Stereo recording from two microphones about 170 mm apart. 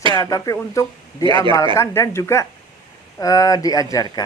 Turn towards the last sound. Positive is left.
turn(degrees=20)  # may be behind; listen again after turning